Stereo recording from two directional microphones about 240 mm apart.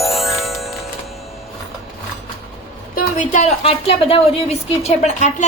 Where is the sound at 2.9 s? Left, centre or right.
Left.